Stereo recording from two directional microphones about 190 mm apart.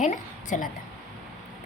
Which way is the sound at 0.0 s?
40° left (ahead or behind).